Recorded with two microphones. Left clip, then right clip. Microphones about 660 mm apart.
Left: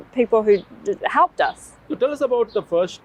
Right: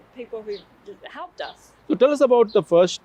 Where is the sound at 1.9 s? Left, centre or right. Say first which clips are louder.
Right 4 dB; right.